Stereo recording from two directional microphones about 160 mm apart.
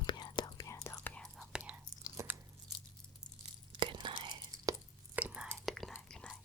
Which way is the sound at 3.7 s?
30° right (ahead or behind).